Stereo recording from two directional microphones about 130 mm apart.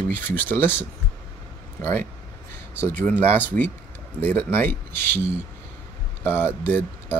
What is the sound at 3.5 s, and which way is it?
Speech, 90° right.